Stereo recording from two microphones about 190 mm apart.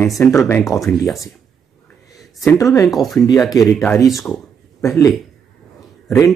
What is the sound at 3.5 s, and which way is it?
Speech, 20° left (ahead or behind).